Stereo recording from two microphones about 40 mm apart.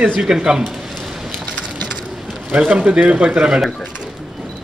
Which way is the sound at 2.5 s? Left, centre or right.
Right.